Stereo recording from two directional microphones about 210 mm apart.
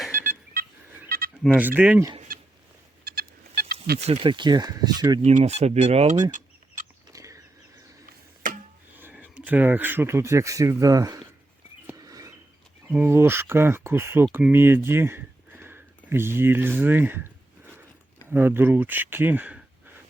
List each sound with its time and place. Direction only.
0.1 s telephone dialing: 40° right (ahead or behind)
1.0 s bleat: 45° right (ahead or behind)
1.5 s speech: 10° right (ahead or behind)
3.0 s a sound: 45° right (ahead or behind)
4.0 s speech: 25° right (ahead or behind)
5.2 s speech: 30° right (ahead or behind)
7.1 s a sound: 15° right (ahead or behind)
9.0 s speech: 10° right (ahead or behind)
11.9 s a sound: 15° right (ahead or behind)
12.9 s speech: 10° right (ahead or behind)
18.3 s speech: 10° right (ahead or behind)